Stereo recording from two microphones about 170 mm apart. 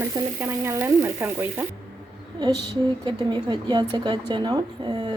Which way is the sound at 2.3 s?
25° right (ahead or behind).